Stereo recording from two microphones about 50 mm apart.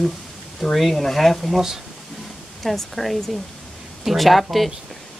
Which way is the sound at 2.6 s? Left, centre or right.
Centre.